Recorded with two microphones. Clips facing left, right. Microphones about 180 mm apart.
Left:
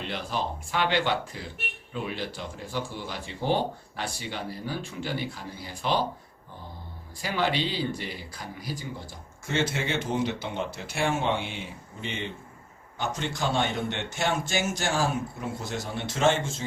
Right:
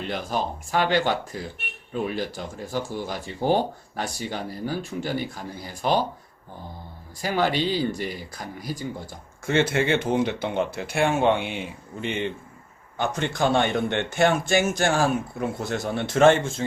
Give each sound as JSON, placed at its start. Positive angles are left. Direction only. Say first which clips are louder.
{"t": 0.1, "sound": "speech", "louder": "right 4 dB", "side_deg": -45}
{"t": 7.2, "sound": "speech", "louder": "right 4 dB", "side_deg": -45}
{"t": 9.5, "sound": "a man's voice", "louder": "right 7 dB", "side_deg": -60}
{"t": 13.0, "sound": "a man's voice", "louder": "right 6 dB", "side_deg": -55}